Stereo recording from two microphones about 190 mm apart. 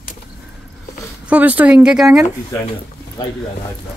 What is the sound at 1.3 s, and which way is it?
Speech, 5° right (ahead or behind).